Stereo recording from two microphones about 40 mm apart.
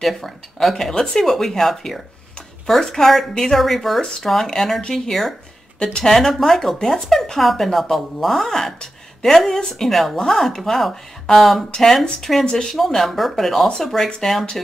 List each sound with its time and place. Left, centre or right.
0.0 s speech: centre
5.8 s speech: centre
11.7 s speech: centre